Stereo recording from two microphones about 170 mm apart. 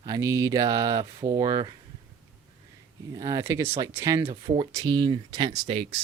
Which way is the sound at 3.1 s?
20° right (ahead or behind).